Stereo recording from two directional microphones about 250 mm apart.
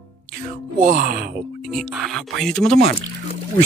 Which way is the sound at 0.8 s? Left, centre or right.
Right.